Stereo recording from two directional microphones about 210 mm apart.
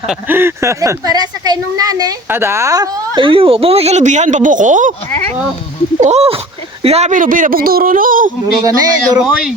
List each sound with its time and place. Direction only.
0.1 s speech: 10° right (ahead or behind); by 4.9 s 35° right (ahead or behind)
6.0 s speech: 30° right (ahead or behind)
8.6 s a man's voice: 15° right (ahead or behind)
9.2 s speech: centre (ahead or behind)